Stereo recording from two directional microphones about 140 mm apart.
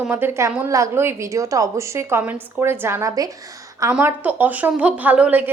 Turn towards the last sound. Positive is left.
turn(degrees=-10)  # may be behind; listen again after turning